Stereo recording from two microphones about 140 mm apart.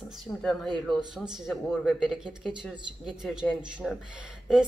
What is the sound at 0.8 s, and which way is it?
A woman's voice, centre (ahead or behind).